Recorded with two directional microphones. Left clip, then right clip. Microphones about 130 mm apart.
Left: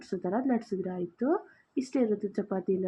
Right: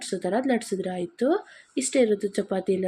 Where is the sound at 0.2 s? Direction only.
20° right (ahead or behind).